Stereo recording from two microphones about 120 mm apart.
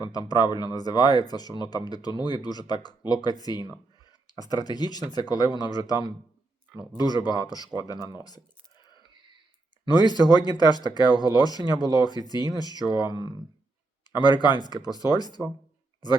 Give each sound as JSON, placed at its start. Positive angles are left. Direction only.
{"t": 0.0, "sound": "speech", "side_deg": 35}
{"t": 9.8, "sound": "speech", "side_deg": 35}
{"t": 14.1, "sound": "speech", "side_deg": 35}